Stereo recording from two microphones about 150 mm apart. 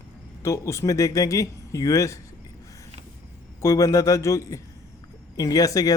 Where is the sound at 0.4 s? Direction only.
20° left (ahead or behind).